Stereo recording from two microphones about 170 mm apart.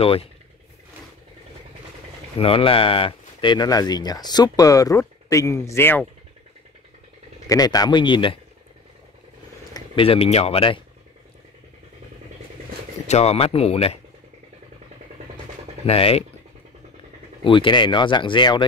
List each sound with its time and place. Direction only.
0.0 s speech: 35° left (ahead or behind)
2.3 s speech: 35° left (ahead or behind); by 6.0 s 15° left (ahead or behind)
7.4 s speech: 20° left (ahead or behind)
9.8 s speech: 30° left (ahead or behind)
13.0 s speech: 40° left (ahead or behind)
15.9 s speech: 35° left (ahead or behind)
17.4 s speech: 30° left (ahead or behind)